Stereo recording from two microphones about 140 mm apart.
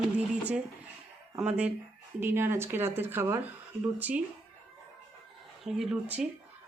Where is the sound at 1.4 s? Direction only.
10° right (ahead or behind).